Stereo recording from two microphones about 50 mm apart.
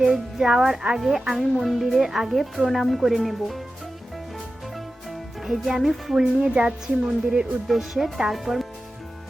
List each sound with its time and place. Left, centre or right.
0.0 s a woman's voice: centre
5.5 s speech: centre
6.4 s a woman's voice: centre